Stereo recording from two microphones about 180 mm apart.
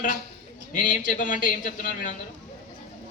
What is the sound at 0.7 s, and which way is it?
A man's voice, 45° left (ahead or behind).